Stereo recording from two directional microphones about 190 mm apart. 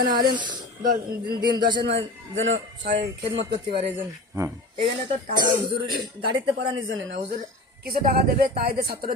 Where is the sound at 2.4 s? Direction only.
80° right.